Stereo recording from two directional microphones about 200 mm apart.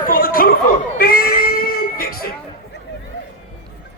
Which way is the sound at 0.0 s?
45° left (ahead or behind).